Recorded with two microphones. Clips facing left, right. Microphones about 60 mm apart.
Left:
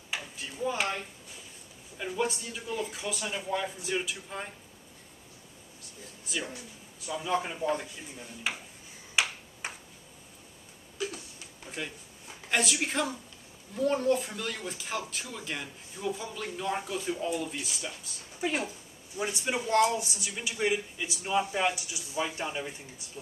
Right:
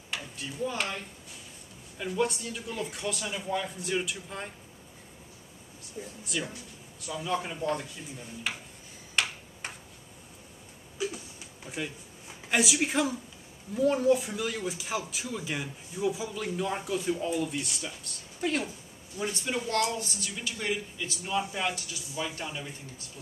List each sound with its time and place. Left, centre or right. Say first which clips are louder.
0.1 s a sound: even; centre
2.0 s speech: right 2 dB; centre
6.2 s speech: even; centre
9.2 s tick-tock: left 1 dB; centre
11.0 s a sound: right 2 dB; centre
12.4 s speech: right 2 dB; centre